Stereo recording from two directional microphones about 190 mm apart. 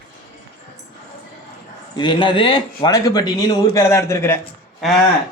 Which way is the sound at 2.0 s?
25° left (ahead or behind).